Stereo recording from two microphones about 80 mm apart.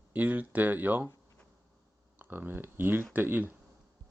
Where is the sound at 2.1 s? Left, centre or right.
Right.